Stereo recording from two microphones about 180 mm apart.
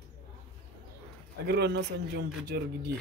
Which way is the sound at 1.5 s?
65° right (ahead or behind).